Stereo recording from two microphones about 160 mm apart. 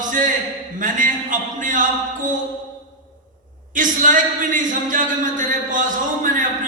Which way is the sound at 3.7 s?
55° right (ahead or behind).